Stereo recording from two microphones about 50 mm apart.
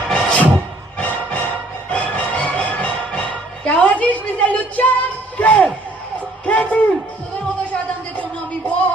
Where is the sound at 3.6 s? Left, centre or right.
Left.